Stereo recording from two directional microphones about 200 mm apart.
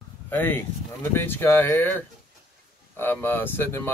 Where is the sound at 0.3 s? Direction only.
10° left (ahead or behind).